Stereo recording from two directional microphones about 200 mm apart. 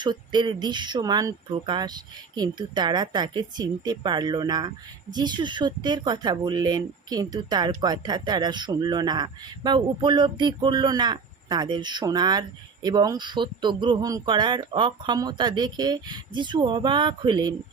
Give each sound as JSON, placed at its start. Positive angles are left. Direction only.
{"t": 0.0, "sound": "speech", "side_deg": -20}